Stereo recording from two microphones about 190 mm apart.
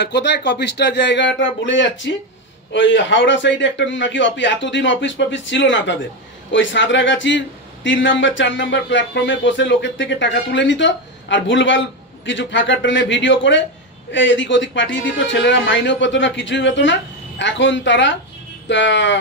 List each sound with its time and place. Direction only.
0.0 s a man's voice: 65° left (ahead or behind)